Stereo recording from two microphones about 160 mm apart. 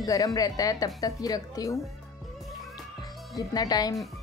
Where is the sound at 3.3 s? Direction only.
25° left (ahead or behind).